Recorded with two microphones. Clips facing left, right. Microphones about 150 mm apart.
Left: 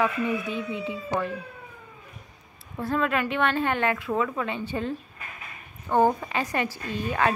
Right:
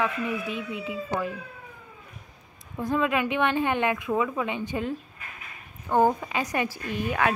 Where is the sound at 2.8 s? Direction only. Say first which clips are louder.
Right 1 dB; 15° right (ahead or behind).